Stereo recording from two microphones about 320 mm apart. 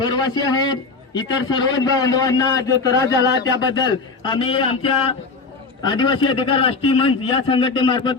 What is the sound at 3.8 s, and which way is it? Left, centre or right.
A man's voice, centre.